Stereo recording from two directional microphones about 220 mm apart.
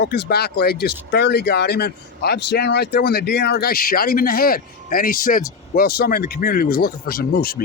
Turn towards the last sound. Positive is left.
turn(degrees=45)  # may be behind; listen again after turning